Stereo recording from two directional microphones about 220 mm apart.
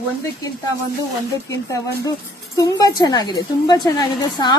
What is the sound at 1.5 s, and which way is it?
A woman's voice, 15° left (ahead or behind).